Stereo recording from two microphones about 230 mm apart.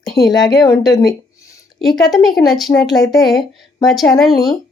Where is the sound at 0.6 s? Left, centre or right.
Centre.